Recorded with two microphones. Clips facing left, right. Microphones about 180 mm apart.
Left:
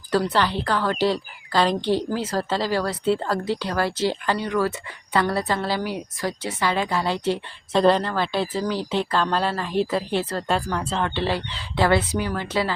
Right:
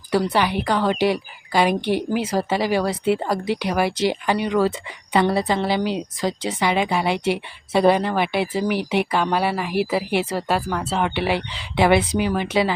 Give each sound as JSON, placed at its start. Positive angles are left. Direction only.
{"t": 0.1, "sound": "a woman's voice", "side_deg": -15}